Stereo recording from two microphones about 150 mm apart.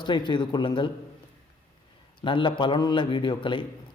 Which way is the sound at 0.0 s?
30° left (ahead or behind).